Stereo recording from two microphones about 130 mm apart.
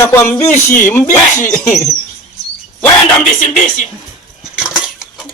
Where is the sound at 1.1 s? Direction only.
75° left (ahead or behind).